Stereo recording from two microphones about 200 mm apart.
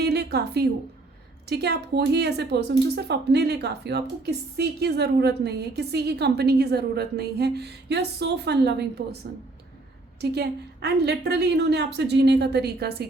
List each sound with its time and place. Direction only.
0.0 s a sound: 55° right (ahead or behind)
1.5 s a woman's voice: 55° right (ahead or behind)
10.2 s a woman's voice: 55° right (ahead or behind)